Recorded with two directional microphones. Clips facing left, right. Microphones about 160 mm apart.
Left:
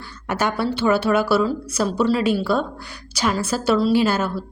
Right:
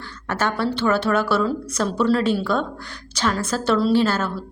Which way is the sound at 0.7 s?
10° left (ahead or behind).